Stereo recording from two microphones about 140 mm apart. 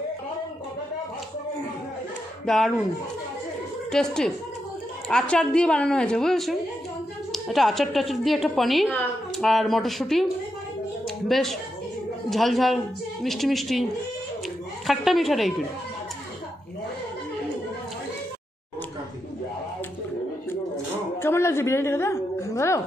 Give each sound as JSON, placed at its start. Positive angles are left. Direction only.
{"t": 2.4, "sound": "speech", "side_deg": 0}
{"t": 3.9, "sound": "a woman's voice", "side_deg": 5}
{"t": 11.1, "sound": "a sound", "side_deg": 0}
{"t": 12.3, "sound": "a woman's voice", "side_deg": 0}
{"t": 14.9, "sound": "a woman's voice", "side_deg": 0}
{"t": 21.2, "sound": "a sound", "side_deg": 20}